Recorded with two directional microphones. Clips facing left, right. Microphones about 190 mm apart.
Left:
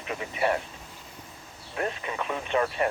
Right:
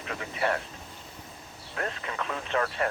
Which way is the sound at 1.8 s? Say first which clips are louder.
Left 3 dB; 15° left (ahead or behind).